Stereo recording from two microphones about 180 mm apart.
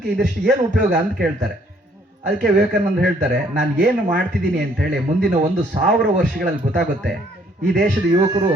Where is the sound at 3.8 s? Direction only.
50° right (ahead or behind).